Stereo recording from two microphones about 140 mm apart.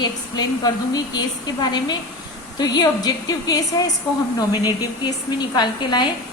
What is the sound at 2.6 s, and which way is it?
A woman's voice, 30° left (ahead or behind).